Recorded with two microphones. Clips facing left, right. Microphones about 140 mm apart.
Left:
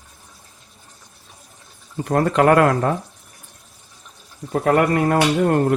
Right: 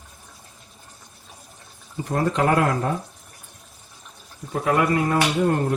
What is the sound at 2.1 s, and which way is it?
Speech, 70° left (ahead or behind).